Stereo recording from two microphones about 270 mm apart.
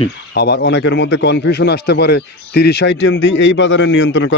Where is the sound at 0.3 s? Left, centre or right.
Left.